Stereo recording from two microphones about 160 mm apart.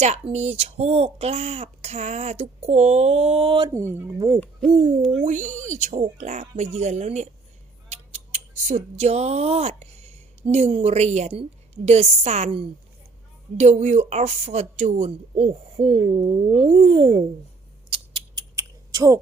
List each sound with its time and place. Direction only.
0.0 s speech: 45° right (ahead or behind)
3.7 s speech: 15° right (ahead or behind)
5.2 s speech: 50° right (ahead or behind); by 17.2 s 35° right (ahead or behind)
17.9 s a sound: 30° right (ahead or behind)
18.5 s typing: 20° right (ahead or behind)